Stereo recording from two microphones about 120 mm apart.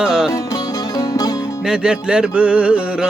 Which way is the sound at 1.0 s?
30° left (ahead or behind).